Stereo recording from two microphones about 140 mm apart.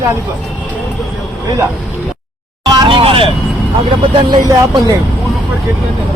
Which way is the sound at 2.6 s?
30° right (ahead or behind).